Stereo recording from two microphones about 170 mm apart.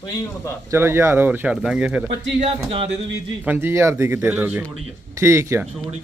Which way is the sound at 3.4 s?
10° right (ahead or behind).